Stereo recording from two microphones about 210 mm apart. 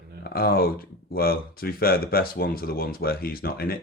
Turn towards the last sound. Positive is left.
turn(degrees=45)  # may be behind; listen again after turning